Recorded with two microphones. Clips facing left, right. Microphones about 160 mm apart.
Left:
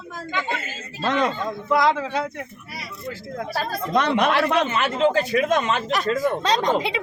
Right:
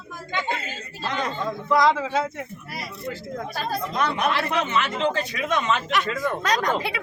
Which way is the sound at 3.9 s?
75° left (ahead or behind).